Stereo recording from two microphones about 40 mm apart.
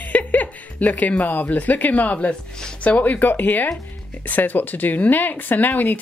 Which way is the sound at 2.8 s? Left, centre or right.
Left.